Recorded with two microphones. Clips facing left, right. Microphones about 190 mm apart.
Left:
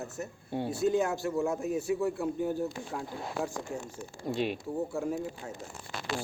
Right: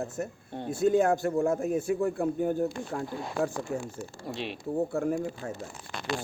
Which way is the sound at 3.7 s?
60° right (ahead or behind).